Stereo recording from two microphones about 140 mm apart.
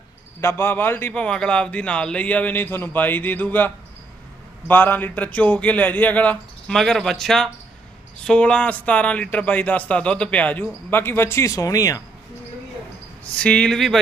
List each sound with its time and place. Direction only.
0.4 s a man's voice: 15° left (ahead or behind)
4.7 s a man's voice: 15° left (ahead or behind)
13.2 s a man's voice: 10° left (ahead or behind)